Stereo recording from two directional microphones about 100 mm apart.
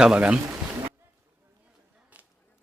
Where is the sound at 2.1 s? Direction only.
15° right (ahead or behind).